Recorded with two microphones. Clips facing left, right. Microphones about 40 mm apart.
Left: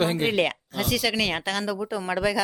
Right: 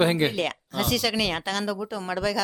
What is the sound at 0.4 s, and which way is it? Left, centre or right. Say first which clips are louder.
Speech: even; centre.